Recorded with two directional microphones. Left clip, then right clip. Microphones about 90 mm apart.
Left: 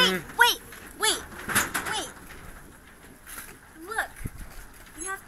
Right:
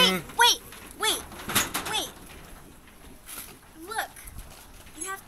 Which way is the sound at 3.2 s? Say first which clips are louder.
Left 1 dB; 20° right (ahead or behind).